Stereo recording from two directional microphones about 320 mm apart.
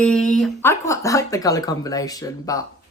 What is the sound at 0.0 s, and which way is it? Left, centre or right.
Speech, centre.